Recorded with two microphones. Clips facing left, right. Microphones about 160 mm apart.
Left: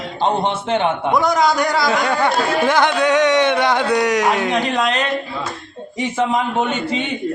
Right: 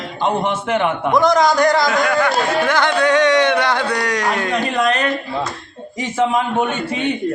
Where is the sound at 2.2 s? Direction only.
20° left (ahead or behind).